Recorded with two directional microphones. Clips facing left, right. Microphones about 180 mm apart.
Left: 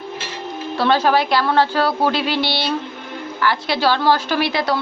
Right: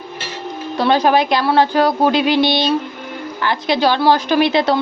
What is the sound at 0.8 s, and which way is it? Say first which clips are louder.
Speech: right 2 dB; 15° right (ahead or behind).